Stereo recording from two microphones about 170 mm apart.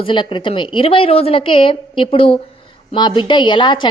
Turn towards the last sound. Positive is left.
turn(degrees=30)  # may be behind; listen again after turning